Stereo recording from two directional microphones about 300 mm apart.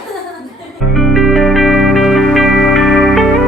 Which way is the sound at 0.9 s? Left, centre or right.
Centre.